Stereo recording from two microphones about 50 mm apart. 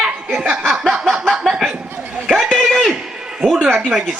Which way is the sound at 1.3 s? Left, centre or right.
Centre.